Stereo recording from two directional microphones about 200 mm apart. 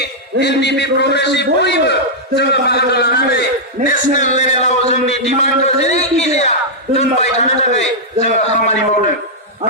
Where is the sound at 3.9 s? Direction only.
40° left (ahead or behind).